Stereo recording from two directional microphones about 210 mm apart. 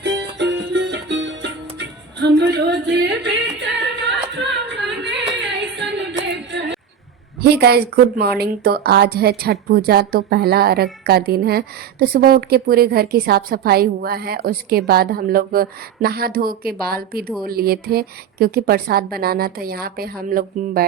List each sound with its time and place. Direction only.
0.0 s music: 55° right (ahead or behind)
5.5 s singing: 55° right (ahead or behind)
7.4 s a woman's voice: 50° right (ahead or behind)